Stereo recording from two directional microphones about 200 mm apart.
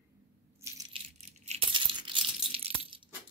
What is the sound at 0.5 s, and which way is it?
Coin, 15° right (ahead or behind).